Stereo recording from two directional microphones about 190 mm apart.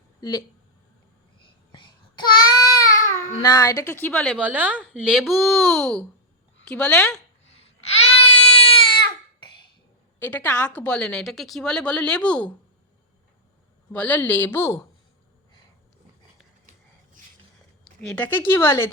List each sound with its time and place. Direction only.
0.2 s speech: 20° left (ahead or behind)
1.7 s child singing: 25° left (ahead or behind)
3.4 s a woman's voice: 20° left (ahead or behind)
4.4 s a woman's voice: 10° right (ahead or behind)
7.6 s baby cry: 35° left (ahead or behind)
10.2 s speech: 10° left (ahead or behind)
13.9 s a woman's voice: 10° left (ahead or behind)
18.0 s a woman's voice: 10° left (ahead or behind)